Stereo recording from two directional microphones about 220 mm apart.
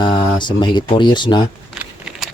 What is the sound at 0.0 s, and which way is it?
Speech, 20° left (ahead or behind).